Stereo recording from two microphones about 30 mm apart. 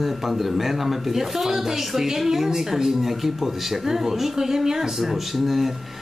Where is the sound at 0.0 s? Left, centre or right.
Centre.